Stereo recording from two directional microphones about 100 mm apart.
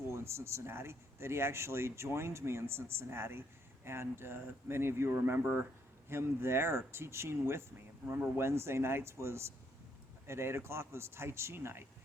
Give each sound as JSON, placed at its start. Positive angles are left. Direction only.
{"t": 0.1, "sound": "speech", "side_deg": -25}